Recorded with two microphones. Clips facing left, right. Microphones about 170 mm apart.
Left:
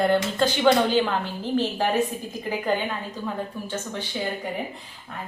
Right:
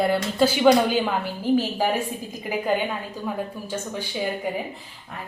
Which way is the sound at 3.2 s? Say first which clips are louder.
Right 2 dB; 10° right (ahead or behind).